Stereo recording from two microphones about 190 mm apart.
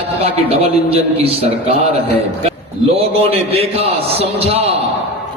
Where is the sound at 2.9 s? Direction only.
30° right (ahead or behind).